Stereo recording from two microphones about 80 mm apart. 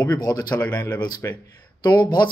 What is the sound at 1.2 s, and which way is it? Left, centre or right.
Speech, left.